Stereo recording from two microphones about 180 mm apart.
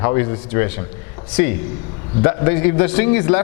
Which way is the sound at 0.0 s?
15° left (ahead or behind).